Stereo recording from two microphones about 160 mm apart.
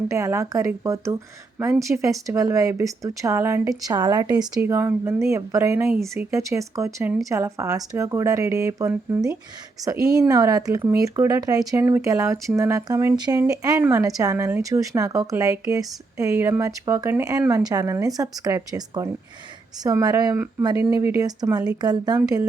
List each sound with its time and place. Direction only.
0.1 s speech: 20° right (ahead or behind)
4.6 s speech: 15° right (ahead or behind)